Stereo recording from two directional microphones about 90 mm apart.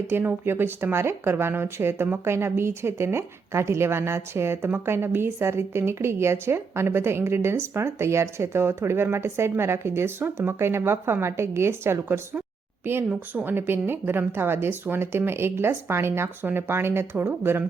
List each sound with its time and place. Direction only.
0.1 s speech: 25° right (ahead or behind)